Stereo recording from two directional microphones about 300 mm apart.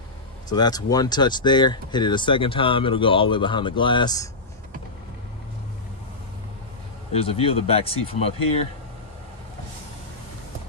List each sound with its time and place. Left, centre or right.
0.5 s speech: centre
7.1 s speech: centre